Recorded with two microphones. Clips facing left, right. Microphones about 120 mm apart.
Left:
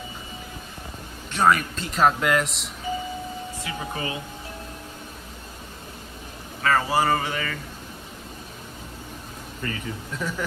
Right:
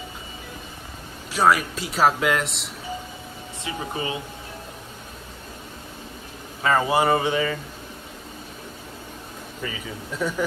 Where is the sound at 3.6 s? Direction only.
25° right (ahead or behind).